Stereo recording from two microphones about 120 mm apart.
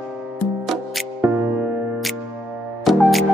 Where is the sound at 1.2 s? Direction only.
15° right (ahead or behind).